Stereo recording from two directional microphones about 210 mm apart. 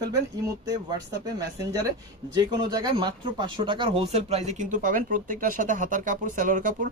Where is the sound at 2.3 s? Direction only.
20° right (ahead or behind).